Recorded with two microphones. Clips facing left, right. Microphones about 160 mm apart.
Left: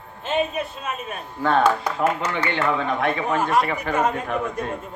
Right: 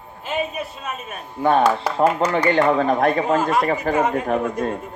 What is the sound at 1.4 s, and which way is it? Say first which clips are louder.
Speech: right 3 dB; 20° right (ahead or behind).